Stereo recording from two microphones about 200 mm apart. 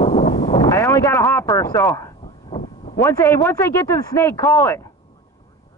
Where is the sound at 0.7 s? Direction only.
10° left (ahead or behind).